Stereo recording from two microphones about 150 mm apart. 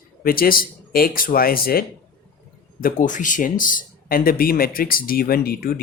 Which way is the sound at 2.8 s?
70° left (ahead or behind).